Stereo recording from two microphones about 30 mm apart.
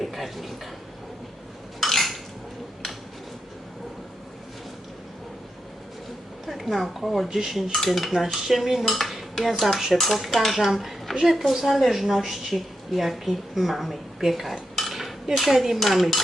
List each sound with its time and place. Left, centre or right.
0.0 s speech: centre
1.8 s dishes: centre
6.4 s a sound: centre
6.7 s a woman's voice: centre
10.8 s dishes: centre
11.2 s a woman's voice: centre
14.8 s cutlery: centre
15.4 s a woman's voice: centre